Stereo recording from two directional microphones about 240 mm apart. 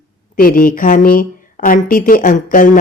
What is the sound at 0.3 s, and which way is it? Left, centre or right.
A woman's voice, left.